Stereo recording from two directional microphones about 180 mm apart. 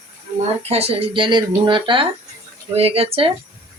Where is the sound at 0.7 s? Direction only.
30° right (ahead or behind).